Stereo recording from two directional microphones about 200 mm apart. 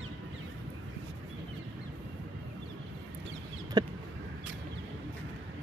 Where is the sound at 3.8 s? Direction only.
20° right (ahead or behind).